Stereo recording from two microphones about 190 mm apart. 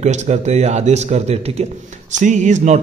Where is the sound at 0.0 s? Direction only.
35° right (ahead or behind).